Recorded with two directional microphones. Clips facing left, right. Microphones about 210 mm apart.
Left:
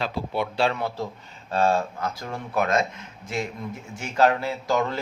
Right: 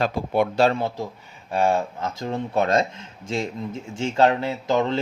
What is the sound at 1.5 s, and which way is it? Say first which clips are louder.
Speech: right 1 dB; 15° right (ahead or behind).